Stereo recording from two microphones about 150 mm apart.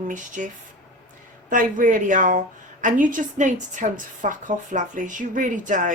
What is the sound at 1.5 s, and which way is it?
A woman's voice, 65° right (ahead or behind).